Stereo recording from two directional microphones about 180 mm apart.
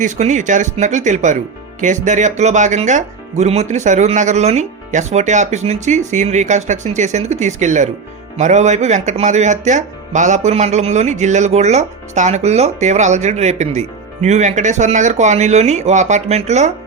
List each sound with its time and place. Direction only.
0.0 s speech: 40° right (ahead or behind)